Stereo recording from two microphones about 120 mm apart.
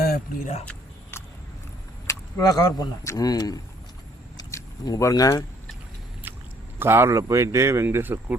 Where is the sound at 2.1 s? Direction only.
30° left (ahead or behind).